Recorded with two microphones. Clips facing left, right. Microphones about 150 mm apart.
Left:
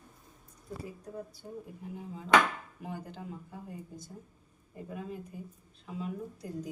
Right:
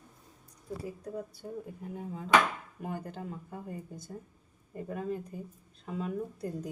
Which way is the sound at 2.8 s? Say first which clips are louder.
Right 3 dB; 50° right (ahead or behind).